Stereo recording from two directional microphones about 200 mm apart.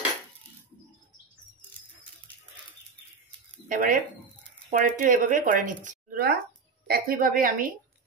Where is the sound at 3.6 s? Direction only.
40° right (ahead or behind).